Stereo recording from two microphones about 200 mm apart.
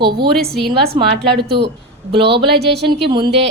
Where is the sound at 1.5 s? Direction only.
60° right (ahead or behind).